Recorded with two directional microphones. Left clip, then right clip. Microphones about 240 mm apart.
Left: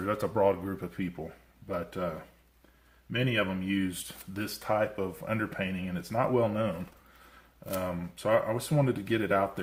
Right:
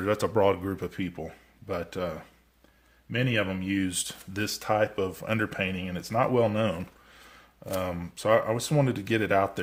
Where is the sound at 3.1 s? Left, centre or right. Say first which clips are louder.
Right 2 dB; right.